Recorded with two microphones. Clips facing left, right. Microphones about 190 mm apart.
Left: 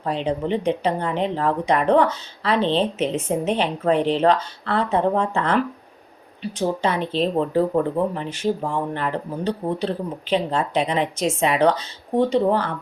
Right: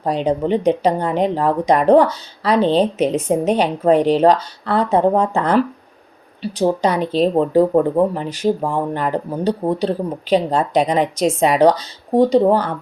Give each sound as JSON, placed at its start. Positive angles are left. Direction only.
{"t": 0.0, "sound": "speech", "side_deg": -40}